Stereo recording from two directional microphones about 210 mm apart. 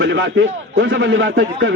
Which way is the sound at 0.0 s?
55° right (ahead or behind).